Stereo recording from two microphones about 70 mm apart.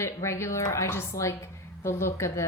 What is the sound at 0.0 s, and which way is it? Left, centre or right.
A woman's voice, left.